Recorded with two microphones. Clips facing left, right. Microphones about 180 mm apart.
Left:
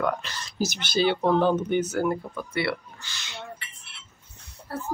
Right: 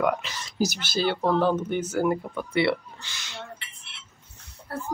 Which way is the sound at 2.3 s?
25° right (ahead or behind).